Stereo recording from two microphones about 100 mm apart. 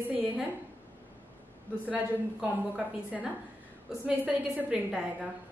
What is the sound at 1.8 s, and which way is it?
A woman's voice, 10° right (ahead or behind).